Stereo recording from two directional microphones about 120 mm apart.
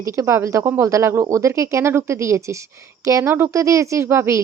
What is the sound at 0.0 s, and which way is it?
Speech, 25° right (ahead or behind).